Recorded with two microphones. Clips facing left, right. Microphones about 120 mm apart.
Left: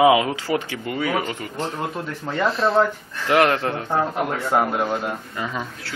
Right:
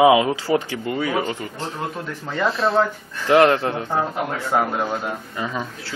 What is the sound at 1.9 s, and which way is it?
Speech, centre (ahead or behind).